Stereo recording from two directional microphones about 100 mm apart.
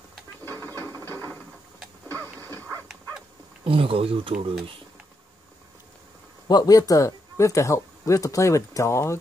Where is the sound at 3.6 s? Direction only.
65° right (ahead or behind).